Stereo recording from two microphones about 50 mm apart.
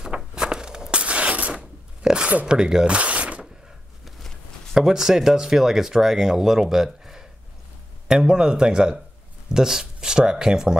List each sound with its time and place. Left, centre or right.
0.4 s walk: centre
1.0 s a sound: right
2.4 s speech: centre
4.7 s speech: centre